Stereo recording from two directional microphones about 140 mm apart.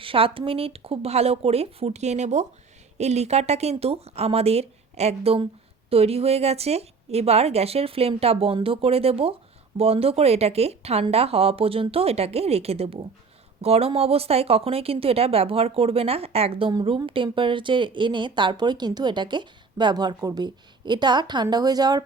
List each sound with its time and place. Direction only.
0.0 s speech: 40° right (ahead or behind)